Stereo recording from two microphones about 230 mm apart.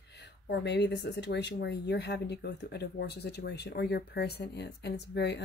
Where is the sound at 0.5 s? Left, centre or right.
Left.